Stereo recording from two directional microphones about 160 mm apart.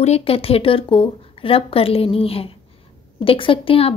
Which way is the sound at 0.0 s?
40° left (ahead or behind).